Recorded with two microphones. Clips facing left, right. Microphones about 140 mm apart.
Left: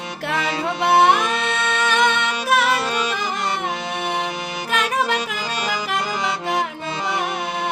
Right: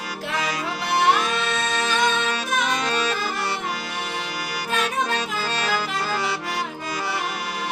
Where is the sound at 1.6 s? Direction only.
70° left (ahead or behind).